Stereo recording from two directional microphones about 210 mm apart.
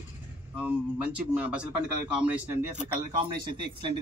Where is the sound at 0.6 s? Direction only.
5° right (ahead or behind).